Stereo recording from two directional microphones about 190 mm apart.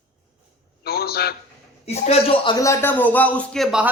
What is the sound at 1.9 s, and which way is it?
A man's voice, 35° left (ahead or behind).